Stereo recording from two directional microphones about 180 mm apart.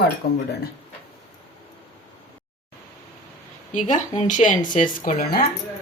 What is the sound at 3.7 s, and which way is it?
A woman's voice, 45° left (ahead or behind).